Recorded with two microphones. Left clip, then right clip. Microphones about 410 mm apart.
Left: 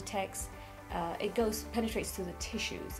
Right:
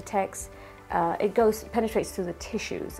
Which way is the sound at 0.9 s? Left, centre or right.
Right.